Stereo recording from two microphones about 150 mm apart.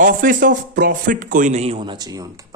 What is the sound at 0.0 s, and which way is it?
Speech, 65° right (ahead or behind).